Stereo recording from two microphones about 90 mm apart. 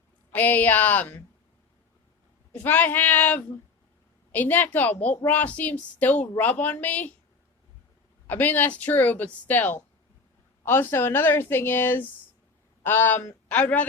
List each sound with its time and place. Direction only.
0.3 s speech: 20° left (ahead or behind)
2.5 s a woman's voice: 20° left (ahead or behind)
8.3 s a man's voice: 20° left (ahead or behind)